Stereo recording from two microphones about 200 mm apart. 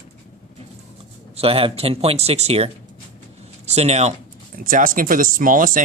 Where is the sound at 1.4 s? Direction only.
30° right (ahead or behind).